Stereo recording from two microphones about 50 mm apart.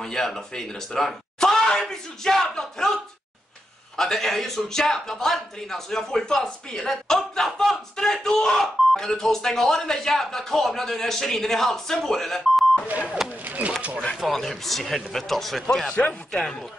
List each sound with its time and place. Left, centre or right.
0.0 s a man's voice: centre
13.5 s speech: right
14.2 s speech: centre
15.9 s speech: left
16.3 s a man's voice: centre